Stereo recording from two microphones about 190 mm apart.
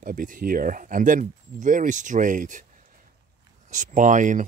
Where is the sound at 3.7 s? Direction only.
40° right (ahead or behind).